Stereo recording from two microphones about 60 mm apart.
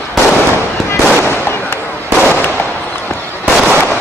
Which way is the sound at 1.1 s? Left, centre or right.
Left.